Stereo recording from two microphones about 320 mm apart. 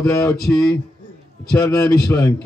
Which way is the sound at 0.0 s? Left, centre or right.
Centre.